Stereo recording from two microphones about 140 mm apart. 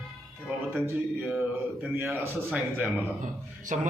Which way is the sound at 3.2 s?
65° right (ahead or behind).